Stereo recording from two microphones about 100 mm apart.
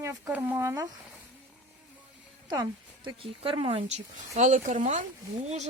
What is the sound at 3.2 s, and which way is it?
Speech, 65° right (ahead or behind).